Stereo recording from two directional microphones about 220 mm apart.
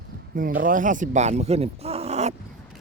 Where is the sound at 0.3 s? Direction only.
40° right (ahead or behind).